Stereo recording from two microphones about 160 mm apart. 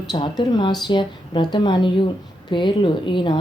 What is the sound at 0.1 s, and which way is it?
Speech, 25° left (ahead or behind).